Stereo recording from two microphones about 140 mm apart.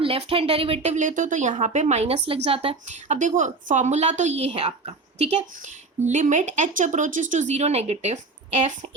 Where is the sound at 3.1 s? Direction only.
65° right (ahead or behind).